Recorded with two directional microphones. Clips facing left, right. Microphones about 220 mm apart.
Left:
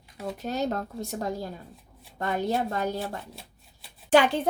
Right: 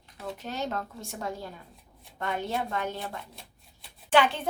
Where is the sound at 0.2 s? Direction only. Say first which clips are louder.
Left 5 dB; 40° left (ahead or behind).